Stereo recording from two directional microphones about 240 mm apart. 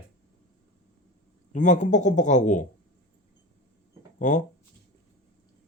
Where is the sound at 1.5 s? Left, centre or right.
Left.